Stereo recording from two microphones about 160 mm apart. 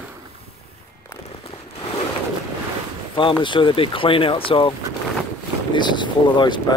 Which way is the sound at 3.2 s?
30° left (ahead or behind).